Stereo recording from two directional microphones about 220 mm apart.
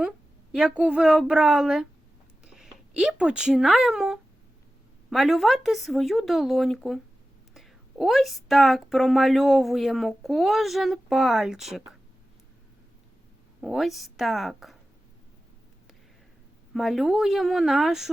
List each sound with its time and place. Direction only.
0.5 s speech: 5° right (ahead or behind)
13.6 s speech: centre (ahead or behind)
16.7 s speech: centre (ahead or behind)